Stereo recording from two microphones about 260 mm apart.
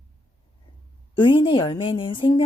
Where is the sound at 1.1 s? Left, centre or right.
Centre.